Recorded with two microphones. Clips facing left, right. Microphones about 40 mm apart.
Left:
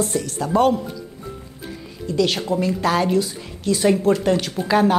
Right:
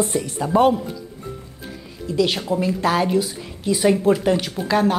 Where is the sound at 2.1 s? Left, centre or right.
Centre.